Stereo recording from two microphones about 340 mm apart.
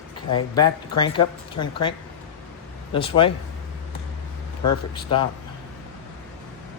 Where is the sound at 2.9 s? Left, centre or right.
Centre.